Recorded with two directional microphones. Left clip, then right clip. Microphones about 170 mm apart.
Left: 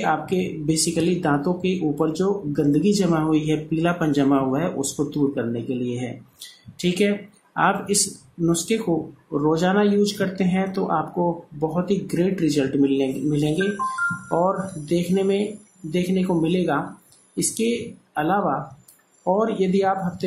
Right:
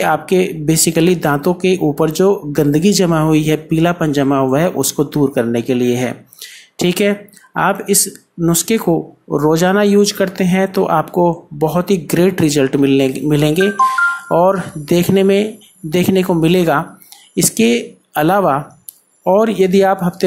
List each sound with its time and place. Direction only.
0.0 s speech: 35° right (ahead or behind)